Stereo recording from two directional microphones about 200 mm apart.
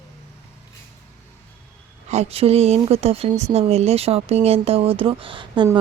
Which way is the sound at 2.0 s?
30° right (ahead or behind).